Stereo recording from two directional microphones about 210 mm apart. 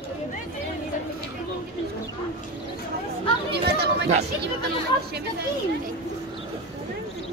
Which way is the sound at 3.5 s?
50° right (ahead or behind).